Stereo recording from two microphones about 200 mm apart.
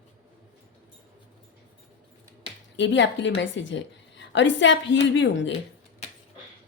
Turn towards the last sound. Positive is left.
turn(degrees=65)  # may be behind; listen again after turning